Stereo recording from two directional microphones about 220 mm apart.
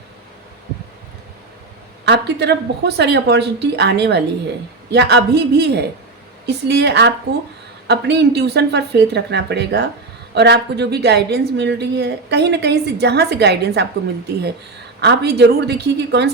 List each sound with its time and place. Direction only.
2.0 s a woman's voice: 50° right (ahead or behind)
15.0 s a woman's voice: 50° right (ahead or behind)